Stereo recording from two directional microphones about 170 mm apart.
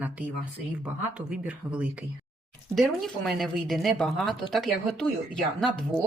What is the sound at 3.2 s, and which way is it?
Speech, centre (ahead or behind).